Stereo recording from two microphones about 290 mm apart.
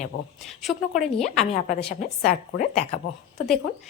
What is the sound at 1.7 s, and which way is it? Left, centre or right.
A woman's voice, left.